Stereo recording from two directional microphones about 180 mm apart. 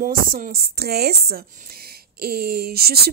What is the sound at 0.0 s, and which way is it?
A woman's voice, 55° right (ahead or behind).